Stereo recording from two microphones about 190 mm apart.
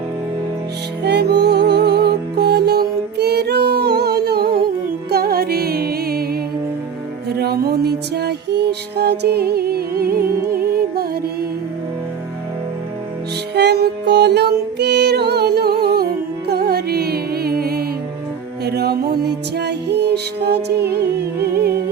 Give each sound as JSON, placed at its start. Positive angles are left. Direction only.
{"t": 1.0, "sound": "music", "side_deg": -60}
{"t": 13.5, "sound": "music", "side_deg": -60}